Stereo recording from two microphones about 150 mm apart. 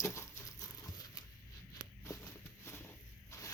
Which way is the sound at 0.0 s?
20° left (ahead or behind).